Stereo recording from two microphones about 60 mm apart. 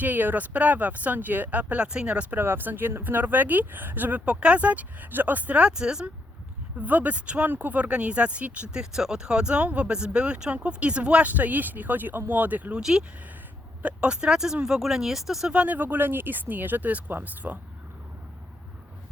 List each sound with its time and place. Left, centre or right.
0.0 s speech: right
2.3 s speech: right; by 6.1 s centre
6.7 s speech: right
8.8 s speech: centre; by 12.8 s right
12.8 s speech: centre
15.5 s speech: right